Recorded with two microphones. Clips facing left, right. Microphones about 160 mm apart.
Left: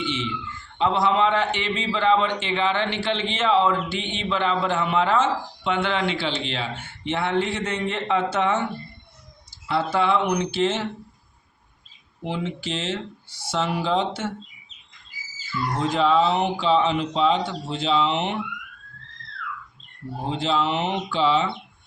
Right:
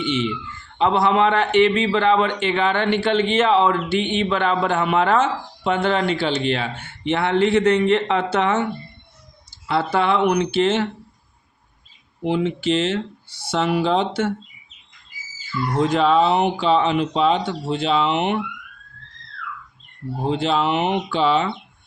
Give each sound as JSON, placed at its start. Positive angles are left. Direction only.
{"t": 0.8, "sound": "a man's voice", "side_deg": -60}
{"t": 9.6, "sound": "a man's voice", "side_deg": -65}
{"t": 12.3, "sound": "a man's voice", "side_deg": -65}
{"t": 15.9, "sound": "a man's voice", "side_deg": -60}
{"t": 20.3, "sound": "a man's voice", "side_deg": -60}